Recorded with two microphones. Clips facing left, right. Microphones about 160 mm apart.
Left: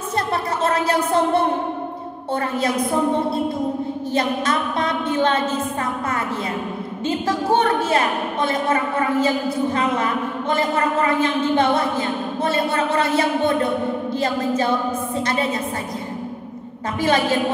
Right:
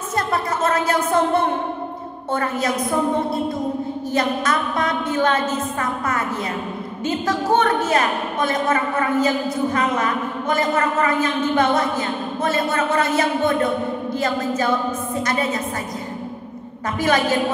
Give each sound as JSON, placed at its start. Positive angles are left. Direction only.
{"t": 0.3, "sound": "a sound", "side_deg": 30}
{"t": 4.1, "sound": "a woman's voice", "side_deg": 25}
{"t": 7.1, "sound": "a woman's voice", "side_deg": 30}
{"t": 17.0, "sound": "a woman's voice", "side_deg": 30}